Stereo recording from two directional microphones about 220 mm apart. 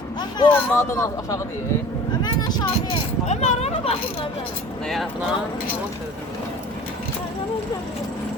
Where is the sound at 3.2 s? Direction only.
30° left (ahead or behind).